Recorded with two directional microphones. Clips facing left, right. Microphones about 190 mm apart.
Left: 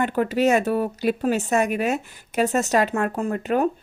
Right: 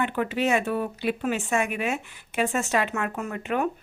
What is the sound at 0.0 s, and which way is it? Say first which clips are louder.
Speech: left 5 dB; 40° left (ahead or behind).